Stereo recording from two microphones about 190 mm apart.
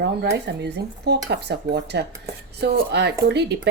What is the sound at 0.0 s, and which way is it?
Speech, 65° right (ahead or behind).